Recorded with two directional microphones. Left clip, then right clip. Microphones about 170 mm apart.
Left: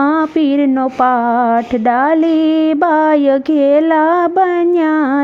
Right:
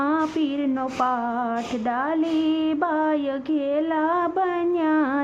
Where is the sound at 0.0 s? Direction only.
45° left (ahead or behind).